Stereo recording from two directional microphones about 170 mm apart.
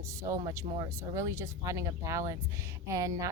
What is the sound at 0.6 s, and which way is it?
Speech, 30° right (ahead or behind).